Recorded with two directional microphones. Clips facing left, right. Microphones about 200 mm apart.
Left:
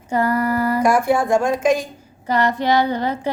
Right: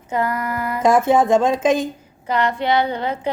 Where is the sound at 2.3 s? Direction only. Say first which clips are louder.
Left 1 dB; 40° left (ahead or behind).